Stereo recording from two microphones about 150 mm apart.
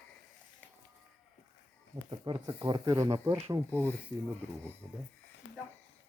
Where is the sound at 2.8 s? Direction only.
20° right (ahead or behind).